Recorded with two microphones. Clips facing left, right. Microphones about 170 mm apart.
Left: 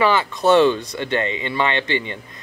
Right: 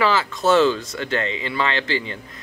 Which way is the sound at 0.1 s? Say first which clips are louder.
Left 2 dB; 20° left (ahead or behind).